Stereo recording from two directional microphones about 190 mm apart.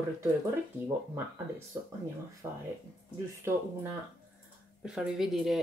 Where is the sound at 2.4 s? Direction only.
15° right (ahead or behind).